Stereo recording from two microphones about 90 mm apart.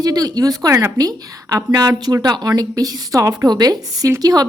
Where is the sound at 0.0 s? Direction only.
45° right (ahead or behind).